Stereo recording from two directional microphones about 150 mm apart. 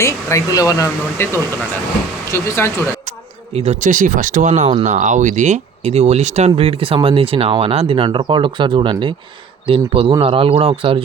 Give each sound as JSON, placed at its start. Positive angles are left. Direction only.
{"t": 0.0, "sound": "speech", "side_deg": 20}
{"t": 2.3, "sound": "speech", "side_deg": 20}
{"t": 3.5, "sound": "speech", "side_deg": -45}